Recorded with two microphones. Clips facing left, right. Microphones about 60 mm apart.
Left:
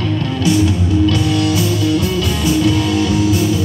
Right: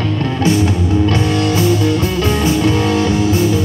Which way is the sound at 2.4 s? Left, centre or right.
Right.